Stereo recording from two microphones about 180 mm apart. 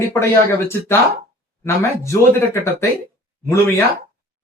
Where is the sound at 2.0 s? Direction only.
15° left (ahead or behind).